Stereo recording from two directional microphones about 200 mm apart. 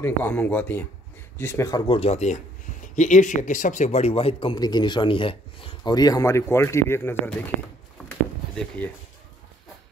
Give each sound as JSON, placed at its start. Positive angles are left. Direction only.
{"t": 0.0, "sound": "speech", "side_deg": 10}
{"t": 1.9, "sound": "a man's voice", "side_deg": 30}
{"t": 8.1, "sound": "a sound", "side_deg": 10}